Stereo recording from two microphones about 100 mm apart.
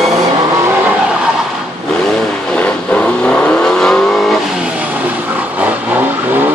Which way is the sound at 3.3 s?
5° left (ahead or behind).